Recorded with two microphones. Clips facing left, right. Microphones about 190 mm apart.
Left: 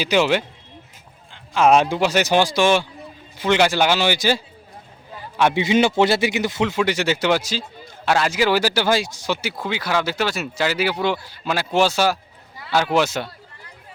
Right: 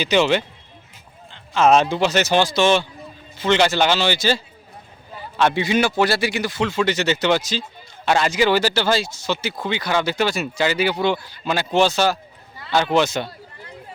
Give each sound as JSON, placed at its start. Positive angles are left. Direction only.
{"t": 0.0, "sound": "a man's voice", "side_deg": 5}